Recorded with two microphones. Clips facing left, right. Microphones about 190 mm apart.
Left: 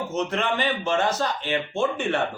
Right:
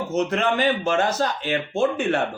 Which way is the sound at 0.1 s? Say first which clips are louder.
Right 5 dB; 40° right (ahead or behind).